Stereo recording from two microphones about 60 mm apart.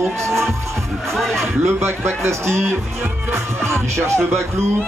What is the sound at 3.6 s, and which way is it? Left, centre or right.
Music, right.